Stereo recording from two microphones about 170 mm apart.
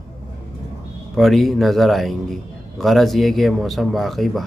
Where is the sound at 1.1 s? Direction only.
Centre (ahead or behind).